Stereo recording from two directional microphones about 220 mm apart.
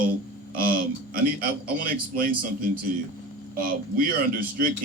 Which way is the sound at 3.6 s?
40° right (ahead or behind).